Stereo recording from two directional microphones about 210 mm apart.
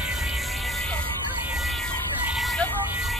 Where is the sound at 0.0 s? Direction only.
Centre (ahead or behind).